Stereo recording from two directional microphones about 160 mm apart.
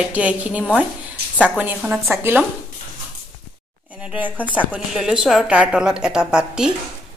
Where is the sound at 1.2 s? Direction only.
80° right.